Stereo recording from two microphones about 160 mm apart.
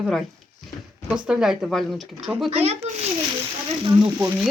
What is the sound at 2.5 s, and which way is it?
Speech, 40° right (ahead or behind).